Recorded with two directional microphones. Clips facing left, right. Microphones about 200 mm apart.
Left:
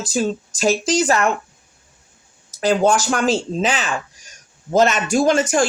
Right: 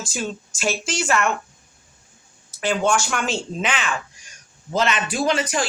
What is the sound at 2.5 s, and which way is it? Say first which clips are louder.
A woman's voice: left 5 dB; 40° left (ahead or behind).